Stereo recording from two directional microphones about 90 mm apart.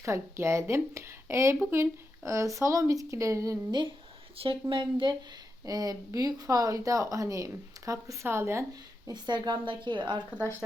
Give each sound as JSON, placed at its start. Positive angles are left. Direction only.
{"t": 0.0, "sound": "speech", "side_deg": -30}
{"t": 4.4, "sound": "speech", "side_deg": -90}
{"t": 4.7, "sound": "speech", "side_deg": -65}
{"t": 5.6, "sound": "speech", "side_deg": -45}
{"t": 9.0, "sound": "speech", "side_deg": -55}